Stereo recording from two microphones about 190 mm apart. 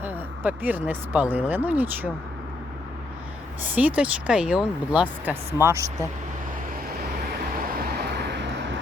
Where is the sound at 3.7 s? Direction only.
10° right (ahead or behind).